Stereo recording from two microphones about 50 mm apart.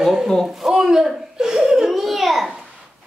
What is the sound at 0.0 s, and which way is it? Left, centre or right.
Speech, centre.